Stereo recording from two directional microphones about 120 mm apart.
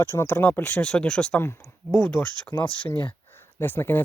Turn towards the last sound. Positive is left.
turn(degrees=15)  # may be behind; listen again after turning